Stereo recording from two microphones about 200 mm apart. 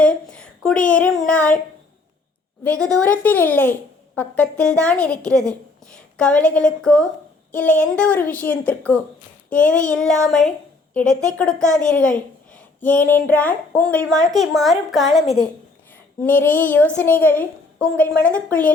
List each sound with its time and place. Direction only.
0.0 s speech: 5° left (ahead or behind)
2.6 s a child's voice: 5° left (ahead or behind)
9.5 s child singing: 5° left (ahead or behind)
9.8 s a child's voice: 5° left (ahead or behind)
16.2 s a woman's voice: 10° left (ahead or behind)